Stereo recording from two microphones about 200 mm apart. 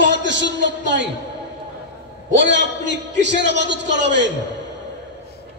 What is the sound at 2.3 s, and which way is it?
A man's voice, 65° right (ahead or behind).